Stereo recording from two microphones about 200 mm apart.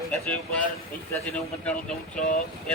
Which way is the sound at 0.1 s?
5° left (ahead or behind).